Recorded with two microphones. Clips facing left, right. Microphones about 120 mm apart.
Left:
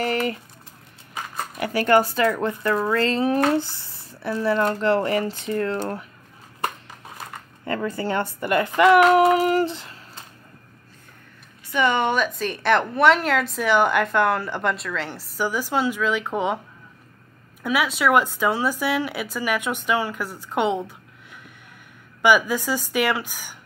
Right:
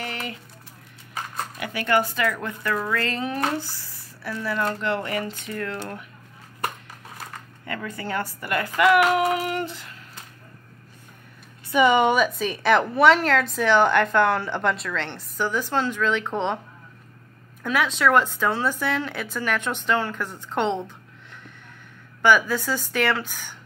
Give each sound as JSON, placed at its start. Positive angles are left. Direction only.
{"t": 0.0, "sound": "a sound", "side_deg": 45}
{"t": 1.6, "sound": "speech", "side_deg": 40}
{"t": 7.6, "sound": "speech", "side_deg": 30}
{"t": 11.7, "sound": "a woman's voice", "side_deg": -10}
{"t": 17.6, "sound": "speech", "side_deg": 10}
{"t": 22.2, "sound": "speech", "side_deg": 15}